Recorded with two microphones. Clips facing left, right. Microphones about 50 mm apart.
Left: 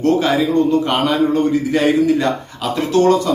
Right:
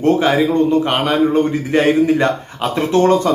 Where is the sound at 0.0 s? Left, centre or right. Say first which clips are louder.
Right 1 dB; right.